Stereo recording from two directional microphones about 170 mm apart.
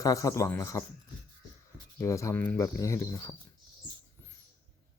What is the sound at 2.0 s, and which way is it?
Speech, 15° left (ahead or behind).